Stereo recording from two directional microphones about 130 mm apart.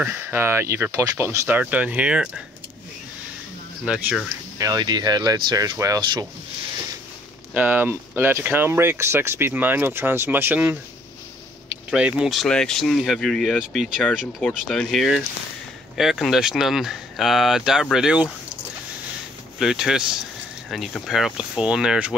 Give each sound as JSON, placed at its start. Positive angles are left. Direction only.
{"t": 0.0, "sound": "speech", "side_deg": -15}
{"t": 3.8, "sound": "speech", "side_deg": -10}
{"t": 4.6, "sound": "speech", "side_deg": -30}
{"t": 7.5, "sound": "speech", "side_deg": -15}
{"t": 11.9, "sound": "speech", "side_deg": -5}
{"t": 19.6, "sound": "speech", "side_deg": -5}